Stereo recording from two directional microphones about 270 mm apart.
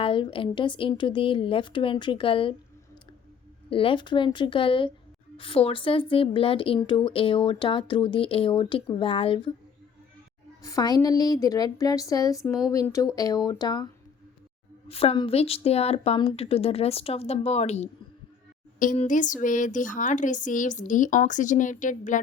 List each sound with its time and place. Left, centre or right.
0.0 s a woman's voice: centre
3.7 s a woman's voice: centre
10.6 s a woman's voice: centre